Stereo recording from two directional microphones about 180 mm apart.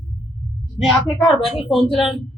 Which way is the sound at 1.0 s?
25° left (ahead or behind).